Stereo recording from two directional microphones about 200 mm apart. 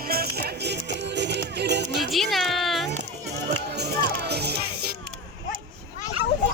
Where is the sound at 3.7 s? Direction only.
55° right (ahead or behind).